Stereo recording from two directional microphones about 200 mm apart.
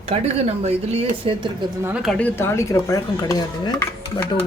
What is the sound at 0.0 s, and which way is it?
Speech, 30° right (ahead or behind).